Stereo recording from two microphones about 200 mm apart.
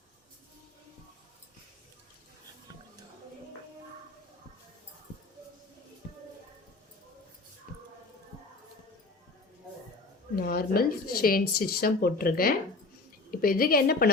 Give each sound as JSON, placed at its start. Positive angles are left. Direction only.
{"t": 10.3, "sound": "speech", "side_deg": 50}